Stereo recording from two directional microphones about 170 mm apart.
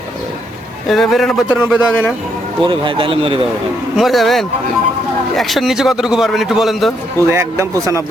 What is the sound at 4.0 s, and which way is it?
A man's voice, centre (ahead or behind).